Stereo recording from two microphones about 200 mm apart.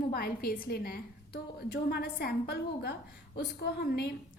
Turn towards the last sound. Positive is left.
turn(degrees=50)  # may be behind; listen again after turning